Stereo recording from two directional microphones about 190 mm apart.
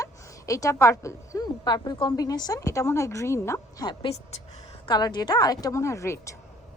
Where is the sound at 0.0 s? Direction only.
15° left (ahead or behind).